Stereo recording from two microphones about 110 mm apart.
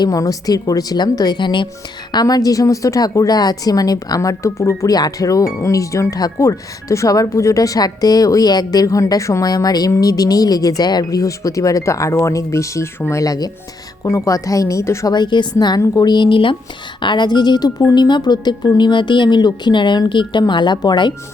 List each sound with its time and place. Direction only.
0.0 s speech: 35° left (ahead or behind)
15.1 s speech: 45° left (ahead or behind)